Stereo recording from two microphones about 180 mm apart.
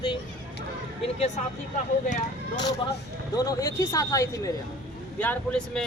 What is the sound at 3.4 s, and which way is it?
Speech, 15° left (ahead or behind).